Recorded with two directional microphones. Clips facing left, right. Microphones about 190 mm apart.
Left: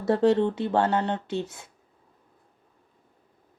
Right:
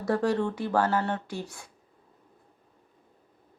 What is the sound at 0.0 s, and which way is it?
Speech, 25° left (ahead or behind).